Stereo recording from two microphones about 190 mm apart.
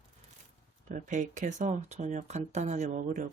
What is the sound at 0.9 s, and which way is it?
Speech, 40° right (ahead or behind).